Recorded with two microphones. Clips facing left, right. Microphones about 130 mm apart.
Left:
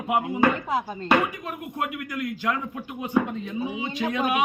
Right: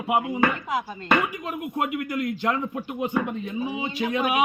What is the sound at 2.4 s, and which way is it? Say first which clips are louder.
Speech: right 2 dB; 25° right (ahead or behind).